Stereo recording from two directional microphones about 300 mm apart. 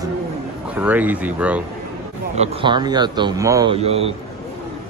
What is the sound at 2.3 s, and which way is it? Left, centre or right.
Speech, right.